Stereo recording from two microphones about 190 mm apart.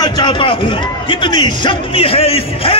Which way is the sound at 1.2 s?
25° left (ahead or behind).